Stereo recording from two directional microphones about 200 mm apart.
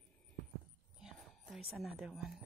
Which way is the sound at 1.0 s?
Centre (ahead or behind).